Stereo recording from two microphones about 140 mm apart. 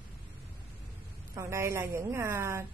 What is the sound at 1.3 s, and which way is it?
A woman's voice, 20° right (ahead or behind).